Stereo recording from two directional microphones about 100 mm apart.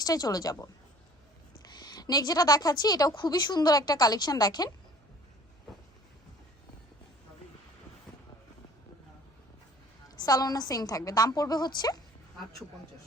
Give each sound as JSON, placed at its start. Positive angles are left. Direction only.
{"t": 0.0, "sound": "a woman's voice", "side_deg": 40}
{"t": 10.2, "sound": "a woman's voice", "side_deg": 40}